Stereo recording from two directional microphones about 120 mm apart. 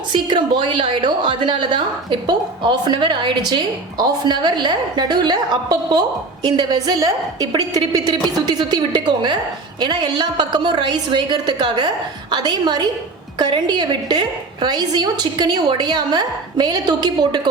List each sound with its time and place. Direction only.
0.1 s a woman's voice: 40° right (ahead or behind)